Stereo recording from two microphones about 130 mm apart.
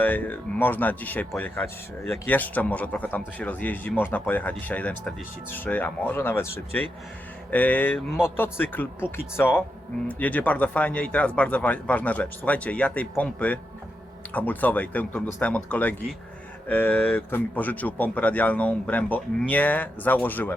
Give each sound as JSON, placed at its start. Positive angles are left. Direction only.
{"t": 0.0, "sound": "speech", "side_deg": 15}